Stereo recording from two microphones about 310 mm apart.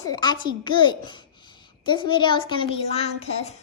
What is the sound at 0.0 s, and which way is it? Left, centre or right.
Speech, centre.